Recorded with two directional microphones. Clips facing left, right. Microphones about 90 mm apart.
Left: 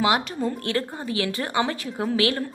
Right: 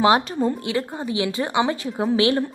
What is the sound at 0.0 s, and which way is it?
Speech, 30° right (ahead or behind).